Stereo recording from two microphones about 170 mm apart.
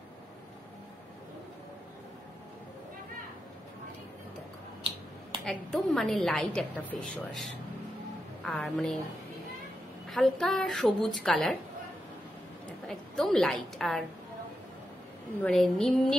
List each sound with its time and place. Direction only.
5.4 s a woman's voice: centre (ahead or behind)
8.5 s a woman's voice: 5° left (ahead or behind)
10.0 s a woman's voice: centre (ahead or behind)
12.8 s a woman's voice: 5° left (ahead or behind)
15.4 s a woman's voice: centre (ahead or behind)